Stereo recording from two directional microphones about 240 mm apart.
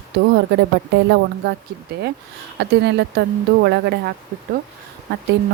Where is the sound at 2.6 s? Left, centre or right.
Right.